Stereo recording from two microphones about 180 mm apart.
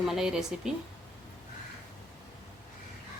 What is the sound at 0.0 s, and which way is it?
Speech, centre (ahead or behind).